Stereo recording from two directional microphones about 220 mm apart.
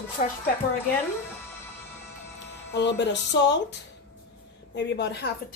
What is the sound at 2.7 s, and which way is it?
Speech, 55° left (ahead or behind).